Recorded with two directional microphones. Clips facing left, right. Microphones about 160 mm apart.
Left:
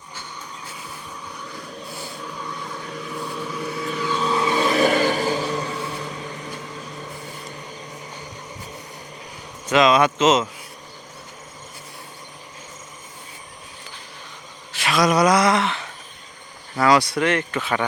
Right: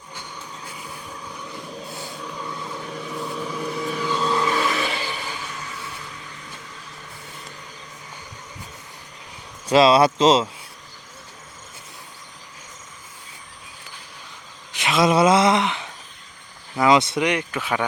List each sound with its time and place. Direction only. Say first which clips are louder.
1.9 s vehicle: even; 20° right (ahead or behind)
2.1 s vehicle: right 1 dB; centre (ahead or behind)
4.1 s vehicle: left 1 dB; 10° left (ahead or behind)
4.6 s vehicle: left 8 dB; 40° left (ahead or behind)
9.6 s speech: right 2 dB; 35° right (ahead or behind)
14.7 s a sound: right 1 dB; 20° right (ahead or behind)
16.7 s speech: even; 20° right (ahead or behind)